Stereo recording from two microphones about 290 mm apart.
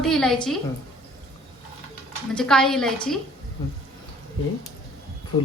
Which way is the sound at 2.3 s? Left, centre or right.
Centre.